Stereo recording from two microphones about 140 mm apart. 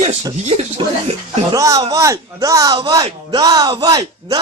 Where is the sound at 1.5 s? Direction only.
25° right (ahead or behind).